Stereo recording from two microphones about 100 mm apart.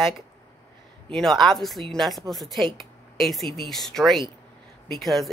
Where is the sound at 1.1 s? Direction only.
5° left (ahead or behind).